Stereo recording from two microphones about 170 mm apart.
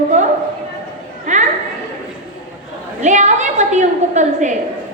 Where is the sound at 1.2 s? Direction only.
45° right (ahead or behind).